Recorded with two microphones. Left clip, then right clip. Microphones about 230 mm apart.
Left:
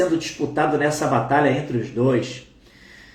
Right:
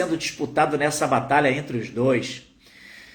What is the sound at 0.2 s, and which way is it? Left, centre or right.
Speech, centre.